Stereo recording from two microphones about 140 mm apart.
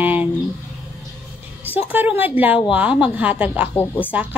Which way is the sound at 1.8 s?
10° right (ahead or behind).